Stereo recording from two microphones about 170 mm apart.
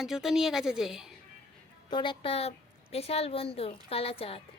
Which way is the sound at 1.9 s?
25° left (ahead or behind).